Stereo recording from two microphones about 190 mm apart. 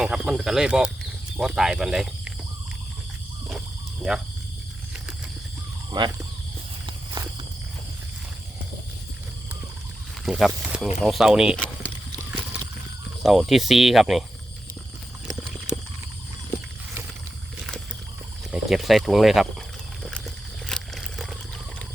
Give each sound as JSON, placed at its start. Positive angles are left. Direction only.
{"t": 0.0, "sound": "speech", "side_deg": -5}
{"t": 6.0, "sound": "speech", "side_deg": -25}
{"t": 6.8, "sound": "walk", "side_deg": -25}
{"t": 10.2, "sound": "speech", "side_deg": 0}
{"t": 13.2, "sound": "speech", "side_deg": 0}
{"t": 18.5, "sound": "speech", "side_deg": 0}
{"t": 20.1, "sound": "a sound", "side_deg": 0}